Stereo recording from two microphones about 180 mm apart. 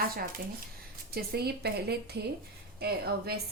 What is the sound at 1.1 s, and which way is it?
A woman's voice, 60° right (ahead or behind).